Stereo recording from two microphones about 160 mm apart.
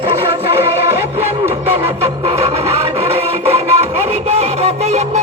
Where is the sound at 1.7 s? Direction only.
40° right (ahead or behind).